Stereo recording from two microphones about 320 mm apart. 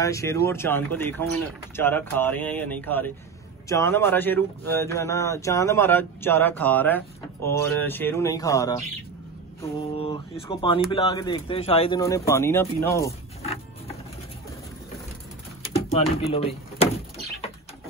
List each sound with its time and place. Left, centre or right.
0.0 s speech: centre
15.7 s speech: centre